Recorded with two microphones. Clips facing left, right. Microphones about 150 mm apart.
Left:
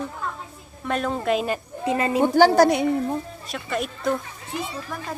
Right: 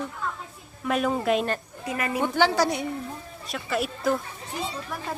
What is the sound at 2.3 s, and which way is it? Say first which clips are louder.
Speech: left 7 dB; 40° left (ahead or behind).